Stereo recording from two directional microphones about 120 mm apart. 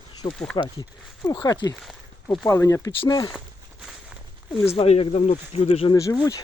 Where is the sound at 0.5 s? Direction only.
40° left (ahead or behind).